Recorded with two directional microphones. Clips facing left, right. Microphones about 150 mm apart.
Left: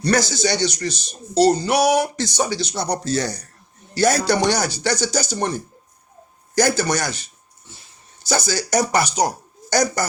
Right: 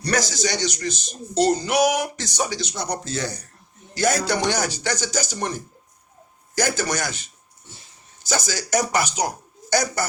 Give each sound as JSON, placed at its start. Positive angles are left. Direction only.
{"t": 0.0, "sound": "a man's voice", "side_deg": 30}
{"t": 6.6, "sound": "a man's voice", "side_deg": 35}
{"t": 8.3, "sound": "a man's voice", "side_deg": 35}